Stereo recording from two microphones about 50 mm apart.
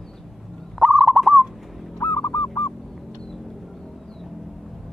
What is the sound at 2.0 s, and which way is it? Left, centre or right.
Goose, left.